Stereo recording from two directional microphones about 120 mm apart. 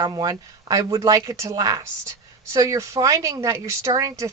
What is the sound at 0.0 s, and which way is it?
Speech, 30° right (ahead or behind).